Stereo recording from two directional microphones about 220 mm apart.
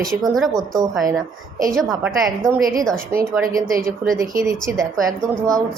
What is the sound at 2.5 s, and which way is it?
Speech, 15° right (ahead or behind).